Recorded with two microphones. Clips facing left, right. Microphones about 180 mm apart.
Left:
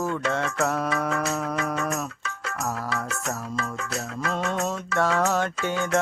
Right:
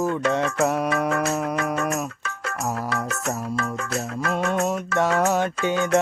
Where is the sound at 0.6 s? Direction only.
15° right (ahead or behind).